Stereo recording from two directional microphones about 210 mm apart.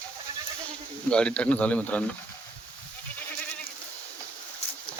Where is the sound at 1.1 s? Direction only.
5° left (ahead or behind).